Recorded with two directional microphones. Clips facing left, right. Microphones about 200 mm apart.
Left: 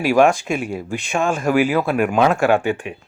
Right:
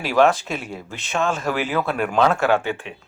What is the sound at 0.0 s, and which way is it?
Speech, 10° left (ahead or behind).